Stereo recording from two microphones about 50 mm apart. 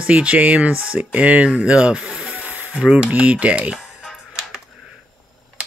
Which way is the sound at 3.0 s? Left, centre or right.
Right.